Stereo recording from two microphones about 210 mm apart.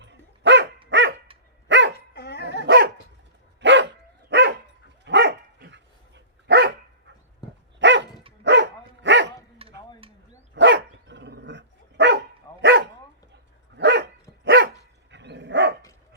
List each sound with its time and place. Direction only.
0.0 s dog: 55° right (ahead or behind)
2.1 s dog: 50° left (ahead or behind)
2.6 s dog: 50° right (ahead or behind)
7.4 s dog: 20° left (ahead or behind)
7.8 s dog: 55° right (ahead or behind)
9.6 s stir: 25° right (ahead or behind)
10.0 s dog: 25° right (ahead or behind)
10.5 s dog: 60° right (ahead or behind)